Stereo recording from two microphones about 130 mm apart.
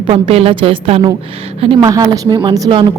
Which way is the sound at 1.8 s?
30° right (ahead or behind).